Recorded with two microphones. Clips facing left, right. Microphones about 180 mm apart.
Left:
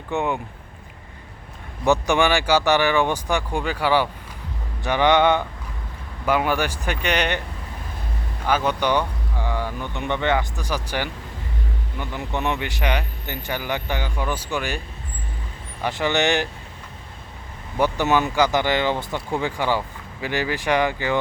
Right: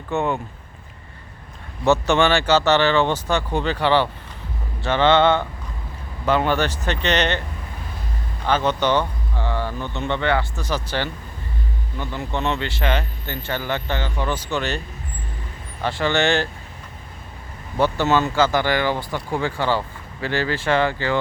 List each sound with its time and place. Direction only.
0.1 s speech: 15° left (ahead or behind)
1.8 s speech: 15° left (ahead or behind)
8.4 s speech: 10° left (ahead or behind)
15.8 s speech: 15° left (ahead or behind)
17.7 s speech: 15° left (ahead or behind)